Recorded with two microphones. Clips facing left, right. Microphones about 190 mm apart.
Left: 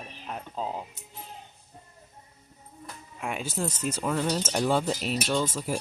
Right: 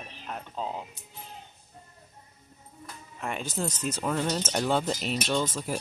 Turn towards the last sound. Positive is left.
turn(degrees=5)  # may be behind; listen again after turning